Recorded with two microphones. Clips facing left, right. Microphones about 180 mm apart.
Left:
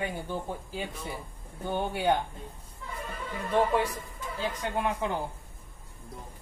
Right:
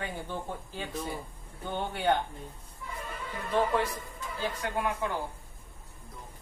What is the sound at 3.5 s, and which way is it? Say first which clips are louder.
Speech: left 2 dB; 15° left (ahead or behind).